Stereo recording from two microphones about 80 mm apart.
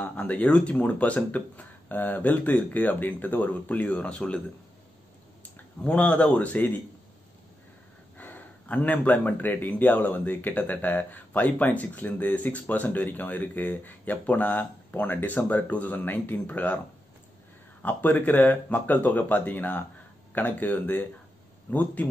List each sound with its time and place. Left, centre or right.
0.0 s a man's voice: centre
5.8 s a man's voice: centre
8.2 s a man's voice: left
17.8 s a man's voice: left